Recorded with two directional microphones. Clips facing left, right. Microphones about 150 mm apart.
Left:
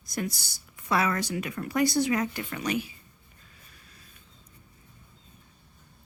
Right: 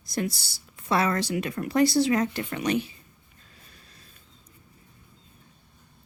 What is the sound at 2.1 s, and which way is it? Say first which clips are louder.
Speech: right 3 dB; 30° right (ahead or behind).